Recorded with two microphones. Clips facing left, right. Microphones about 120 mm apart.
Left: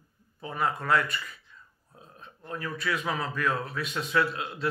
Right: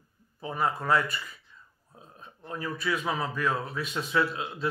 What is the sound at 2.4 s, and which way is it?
Speech, 20° right (ahead or behind).